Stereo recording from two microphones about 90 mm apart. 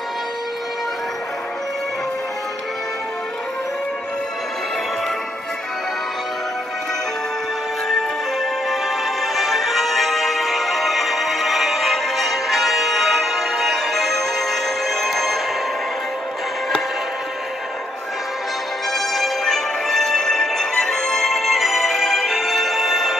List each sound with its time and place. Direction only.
7.9 s music: centre (ahead or behind)
18.9 s music: centre (ahead or behind)